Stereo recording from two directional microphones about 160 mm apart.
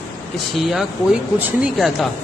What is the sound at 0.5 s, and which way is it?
Speech, centre (ahead or behind).